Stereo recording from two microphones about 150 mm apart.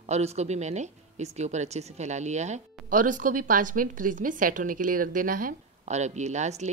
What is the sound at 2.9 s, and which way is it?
Speech, 60° right (ahead or behind).